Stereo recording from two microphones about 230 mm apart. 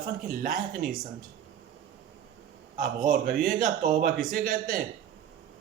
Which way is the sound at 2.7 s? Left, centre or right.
Right.